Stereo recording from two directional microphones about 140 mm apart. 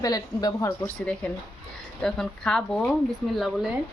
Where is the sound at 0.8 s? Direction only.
10° left (ahead or behind).